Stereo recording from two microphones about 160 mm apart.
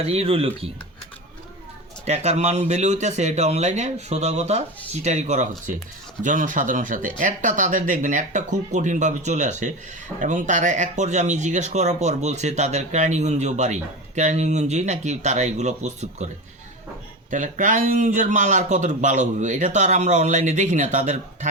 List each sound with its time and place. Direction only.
0.1 s speech: 35° right (ahead or behind)
2.0 s speech: 45° right (ahead or behind)
17.3 s speech: 50° right (ahead or behind)